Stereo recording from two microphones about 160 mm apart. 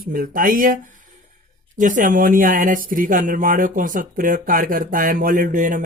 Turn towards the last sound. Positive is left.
turn(degrees=-55)  # may be behind; listen again after turning